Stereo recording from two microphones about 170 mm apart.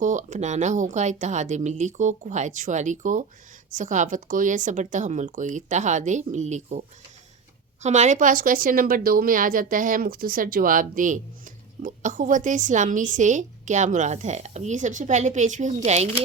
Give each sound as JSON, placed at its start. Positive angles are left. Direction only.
{"t": 0.0, "sound": "a woman's voice", "side_deg": -45}